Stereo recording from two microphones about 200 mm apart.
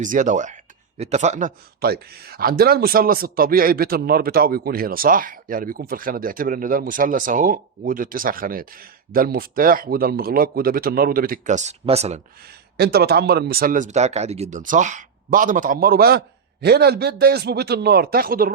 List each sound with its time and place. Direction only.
0.0 s speech: 40° right (ahead or behind)
12.7 s speech: 55° right (ahead or behind)